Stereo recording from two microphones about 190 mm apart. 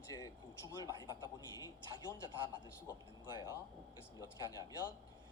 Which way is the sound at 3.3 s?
20° left (ahead or behind).